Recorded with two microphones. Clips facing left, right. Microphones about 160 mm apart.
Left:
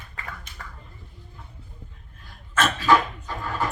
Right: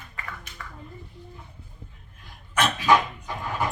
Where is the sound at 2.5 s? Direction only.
15° right (ahead or behind).